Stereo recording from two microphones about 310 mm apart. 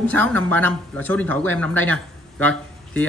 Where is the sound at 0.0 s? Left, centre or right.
Centre.